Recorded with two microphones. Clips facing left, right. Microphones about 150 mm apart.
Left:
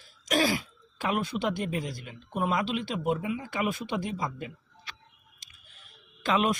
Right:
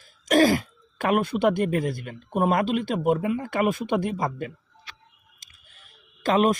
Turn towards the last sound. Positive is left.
turn(degrees=-45)  # may be behind; listen again after turning